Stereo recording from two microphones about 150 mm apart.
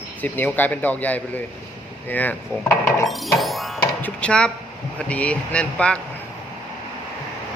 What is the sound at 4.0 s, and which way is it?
Speech, 10° left (ahead or behind).